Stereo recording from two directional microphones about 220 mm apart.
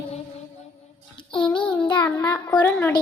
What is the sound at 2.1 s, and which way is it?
Speech, 15° left (ahead or behind).